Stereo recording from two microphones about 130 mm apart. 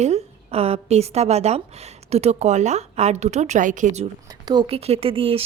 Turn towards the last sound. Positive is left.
turn(degrees=-45)  # may be behind; listen again after turning